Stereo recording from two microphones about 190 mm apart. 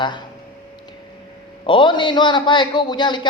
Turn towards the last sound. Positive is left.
turn(degrees=25)  # may be behind; listen again after turning